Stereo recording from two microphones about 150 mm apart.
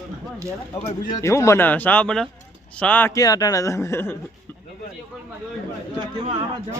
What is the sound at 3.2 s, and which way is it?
Speech, 25° left (ahead or behind).